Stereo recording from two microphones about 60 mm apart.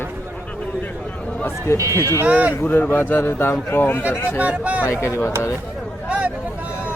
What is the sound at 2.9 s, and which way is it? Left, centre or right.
Speech, left.